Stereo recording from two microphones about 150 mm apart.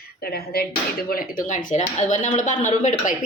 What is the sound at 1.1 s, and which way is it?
Speech, 70° left (ahead or behind).